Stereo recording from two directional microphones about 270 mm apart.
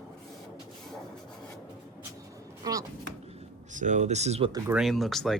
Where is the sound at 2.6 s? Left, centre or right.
Centre.